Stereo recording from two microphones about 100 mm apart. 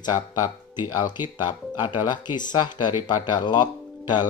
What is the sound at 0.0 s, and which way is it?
Speech, 40° left (ahead or behind).